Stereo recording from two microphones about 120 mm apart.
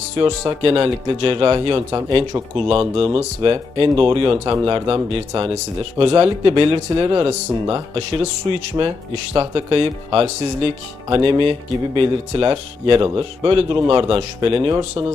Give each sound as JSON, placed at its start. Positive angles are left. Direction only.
{"t": 0.6, "sound": "speech", "side_deg": -55}
{"t": 11.1, "sound": "speech", "side_deg": -45}